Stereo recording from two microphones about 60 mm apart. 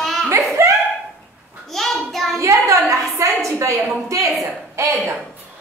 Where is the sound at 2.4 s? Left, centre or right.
Right.